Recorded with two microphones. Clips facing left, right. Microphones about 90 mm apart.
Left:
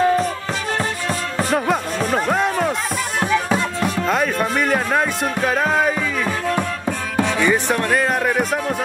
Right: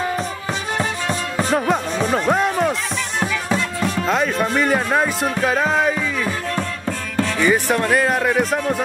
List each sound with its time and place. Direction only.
1.5 s music: centre (ahead or behind)
2.2 s speech: 5° right (ahead or behind)
4.1 s speech: centre (ahead or behind)
7.2 s music: 15° left (ahead or behind)
7.4 s speech: 5° right (ahead or behind)